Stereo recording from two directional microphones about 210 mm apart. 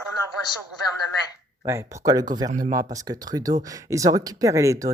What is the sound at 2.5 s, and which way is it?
Speech, 35° right (ahead or behind).